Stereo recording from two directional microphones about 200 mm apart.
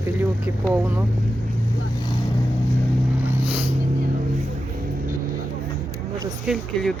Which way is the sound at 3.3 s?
5° right (ahead or behind).